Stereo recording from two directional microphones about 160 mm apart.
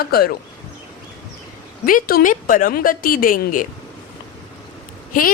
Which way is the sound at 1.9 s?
65° left (ahead or behind).